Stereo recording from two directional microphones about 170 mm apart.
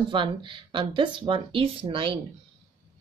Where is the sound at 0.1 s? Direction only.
30° right (ahead or behind).